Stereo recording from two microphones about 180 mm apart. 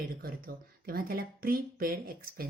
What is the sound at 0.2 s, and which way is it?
Speech, 55° right (ahead or behind).